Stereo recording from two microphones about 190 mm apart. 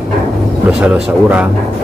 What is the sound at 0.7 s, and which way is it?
Speech, 5° right (ahead or behind).